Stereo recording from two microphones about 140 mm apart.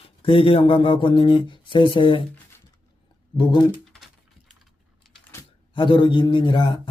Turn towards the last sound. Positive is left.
turn(degrees=35)  # may be behind; listen again after turning